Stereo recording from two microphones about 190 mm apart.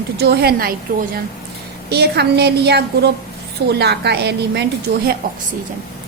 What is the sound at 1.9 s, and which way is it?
A woman's voice, 60° right (ahead or behind).